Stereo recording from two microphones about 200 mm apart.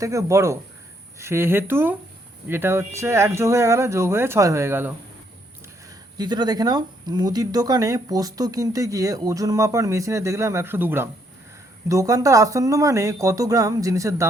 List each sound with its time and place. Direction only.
0.0 s speech: 15° right (ahead or behind)
6.1 s speech: 20° right (ahead or behind)